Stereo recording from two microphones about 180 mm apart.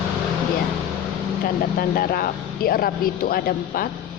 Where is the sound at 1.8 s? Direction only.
55° left (ahead or behind).